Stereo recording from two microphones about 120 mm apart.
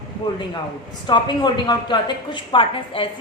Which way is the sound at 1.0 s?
40° left (ahead or behind).